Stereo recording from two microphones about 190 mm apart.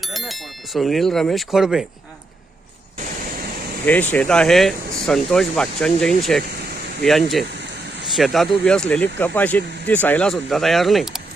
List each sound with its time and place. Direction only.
0.0 s speech: centre (ahead or behind)
3.8 s speech: 10° left (ahead or behind)